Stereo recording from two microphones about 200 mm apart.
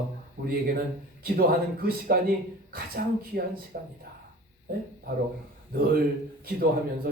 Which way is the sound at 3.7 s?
50° right (ahead or behind).